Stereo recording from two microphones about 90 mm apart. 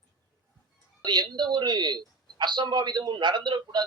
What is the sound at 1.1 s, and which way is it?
A man's voice, 50° right (ahead or behind).